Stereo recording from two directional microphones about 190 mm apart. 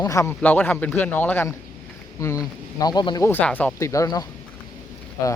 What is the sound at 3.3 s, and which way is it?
Speech, 10° left (ahead or behind).